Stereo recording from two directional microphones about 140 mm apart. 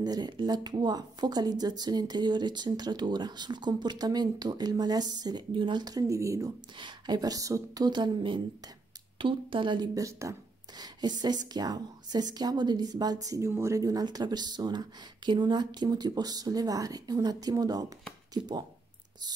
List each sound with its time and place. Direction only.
0.0 s a woman's voice: 30° right (ahead or behind)